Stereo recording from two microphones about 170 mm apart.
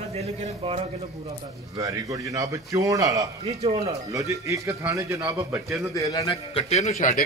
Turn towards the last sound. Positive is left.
turn(degrees=50)  # may be behind; listen again after turning